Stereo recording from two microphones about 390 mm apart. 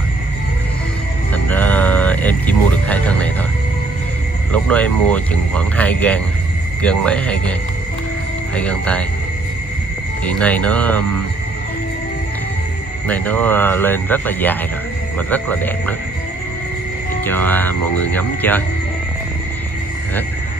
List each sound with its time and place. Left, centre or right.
1.3 s a sound: centre
4.5 s speech: centre
8.5 s speech: centre
10.2 s speech: centre
13.1 s speech: centre
17.3 s speech: centre